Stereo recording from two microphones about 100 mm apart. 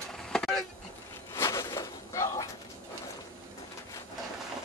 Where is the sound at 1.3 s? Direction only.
25° left (ahead or behind).